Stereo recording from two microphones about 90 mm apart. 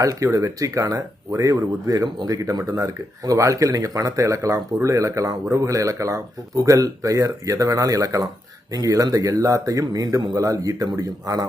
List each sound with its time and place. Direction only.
0.0 s speech: 35° right (ahead or behind)